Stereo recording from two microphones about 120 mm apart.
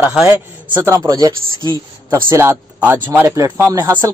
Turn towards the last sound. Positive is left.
turn(degrees=-20)  # may be behind; listen again after turning